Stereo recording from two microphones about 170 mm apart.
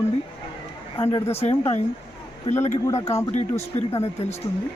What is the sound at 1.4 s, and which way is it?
A man's voice, 40° left (ahead or behind).